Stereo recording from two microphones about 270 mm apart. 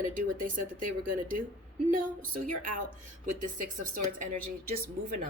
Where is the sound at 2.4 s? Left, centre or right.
Right.